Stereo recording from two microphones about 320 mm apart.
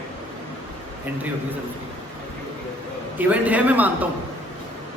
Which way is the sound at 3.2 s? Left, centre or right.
Centre.